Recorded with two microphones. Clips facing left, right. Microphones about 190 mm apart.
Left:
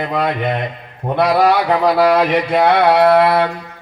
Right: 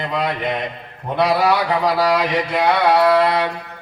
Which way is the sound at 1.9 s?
55° left (ahead or behind).